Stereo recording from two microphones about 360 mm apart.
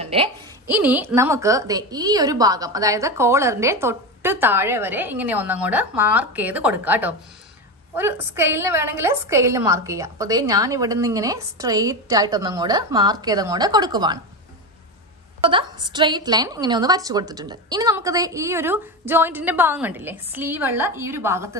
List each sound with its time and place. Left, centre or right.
0.0 s a sound: centre
0.7 s a woman's voice: centre
15.5 s a woman's voice: centre